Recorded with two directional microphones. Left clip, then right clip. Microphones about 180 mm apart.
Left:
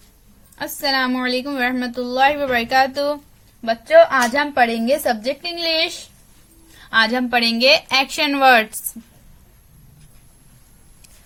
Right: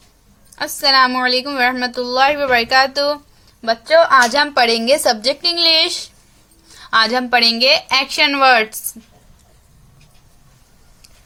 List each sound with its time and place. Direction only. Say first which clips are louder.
0.6 s a woman's voice: right 7 dB; 10° left (ahead or behind)